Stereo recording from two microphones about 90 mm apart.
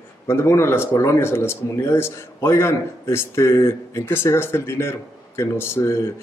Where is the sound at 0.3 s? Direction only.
30° left (ahead or behind).